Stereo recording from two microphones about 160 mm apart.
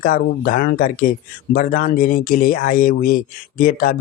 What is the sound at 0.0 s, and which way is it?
Speech, 60° left (ahead or behind).